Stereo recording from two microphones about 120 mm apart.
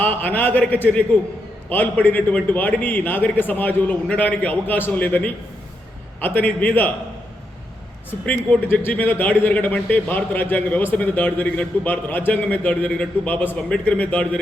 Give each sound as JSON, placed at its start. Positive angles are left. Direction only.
{"t": 0.0, "sound": "a man's voice", "side_deg": 15}
{"t": 8.3, "sound": "a man's voice", "side_deg": 20}